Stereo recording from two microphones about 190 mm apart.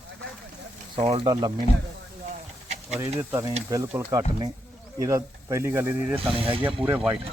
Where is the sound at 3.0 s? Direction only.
15° right (ahead or behind).